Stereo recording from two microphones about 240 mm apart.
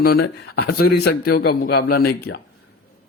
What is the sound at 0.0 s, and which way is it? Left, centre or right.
A man's voice, left.